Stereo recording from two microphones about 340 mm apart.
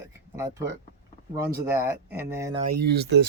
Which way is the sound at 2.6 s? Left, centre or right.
Right.